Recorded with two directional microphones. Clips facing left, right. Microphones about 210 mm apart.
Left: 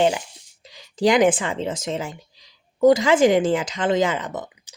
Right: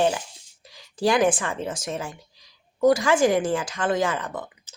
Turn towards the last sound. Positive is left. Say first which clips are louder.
# left 3 dB
turn(degrees=20)  # may be behind; listen again after turning